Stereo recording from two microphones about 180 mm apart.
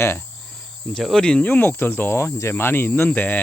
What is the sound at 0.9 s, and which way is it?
Cricket, centre (ahead or behind).